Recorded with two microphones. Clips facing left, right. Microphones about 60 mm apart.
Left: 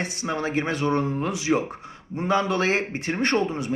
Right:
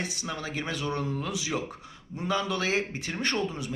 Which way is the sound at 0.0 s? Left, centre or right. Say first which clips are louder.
Left 7 dB; left.